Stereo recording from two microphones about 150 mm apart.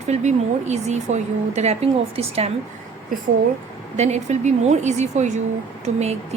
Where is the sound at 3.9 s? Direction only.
50° right (ahead or behind).